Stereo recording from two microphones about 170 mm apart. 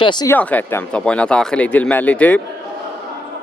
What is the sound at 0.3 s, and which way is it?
Speech, 10° left (ahead or behind).